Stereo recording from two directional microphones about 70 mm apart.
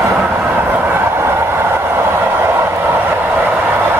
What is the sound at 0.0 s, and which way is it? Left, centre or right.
Train, right.